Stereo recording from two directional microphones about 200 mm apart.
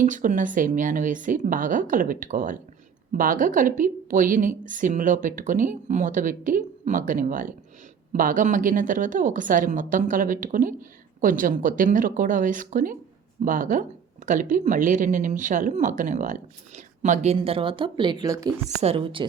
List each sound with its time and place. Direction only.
0.0 s a woman's voice: 40° right (ahead or behind); by 18.5 s 20° right (ahead or behind)
18.7 s speech: 30° right (ahead or behind)